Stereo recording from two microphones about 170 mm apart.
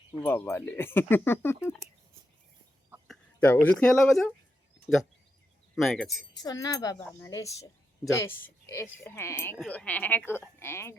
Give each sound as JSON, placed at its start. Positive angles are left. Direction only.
{"t": 0.1, "sound": "speech", "side_deg": 10}
{"t": 3.1, "sound": "speech", "side_deg": 10}
{"t": 6.3, "sound": "a woman's voice", "side_deg": 20}